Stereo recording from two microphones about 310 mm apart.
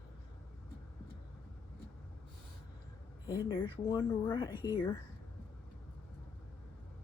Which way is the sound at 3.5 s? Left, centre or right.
Centre.